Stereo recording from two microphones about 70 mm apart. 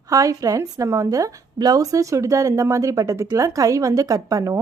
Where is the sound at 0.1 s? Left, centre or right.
Right.